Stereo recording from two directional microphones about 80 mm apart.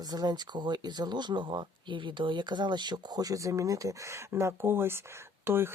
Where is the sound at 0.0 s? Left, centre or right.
Right.